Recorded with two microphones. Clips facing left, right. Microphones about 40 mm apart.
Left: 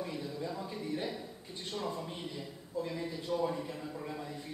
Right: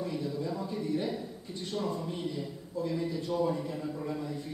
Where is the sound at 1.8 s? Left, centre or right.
Centre.